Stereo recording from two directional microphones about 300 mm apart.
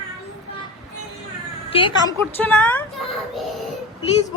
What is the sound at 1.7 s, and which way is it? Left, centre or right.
Speech, centre.